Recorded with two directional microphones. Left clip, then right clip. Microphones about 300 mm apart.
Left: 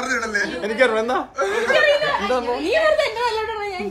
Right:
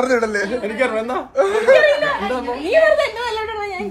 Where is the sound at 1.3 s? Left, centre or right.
Centre.